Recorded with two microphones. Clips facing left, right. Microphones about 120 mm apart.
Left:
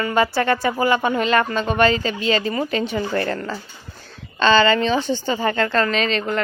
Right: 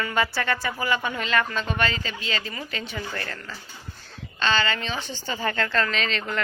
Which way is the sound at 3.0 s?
30° left (ahead or behind).